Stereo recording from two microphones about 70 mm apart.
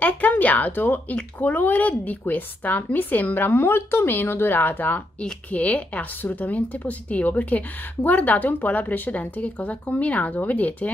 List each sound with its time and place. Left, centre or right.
0.0 s a woman's voice: left